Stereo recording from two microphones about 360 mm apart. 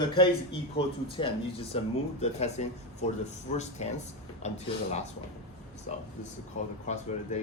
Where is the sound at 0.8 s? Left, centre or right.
Centre.